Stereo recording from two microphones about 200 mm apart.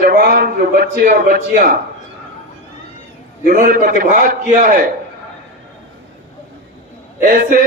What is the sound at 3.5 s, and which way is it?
A man's voice, 40° right (ahead or behind).